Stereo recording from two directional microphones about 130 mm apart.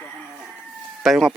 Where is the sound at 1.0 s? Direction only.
Centre (ahead or behind).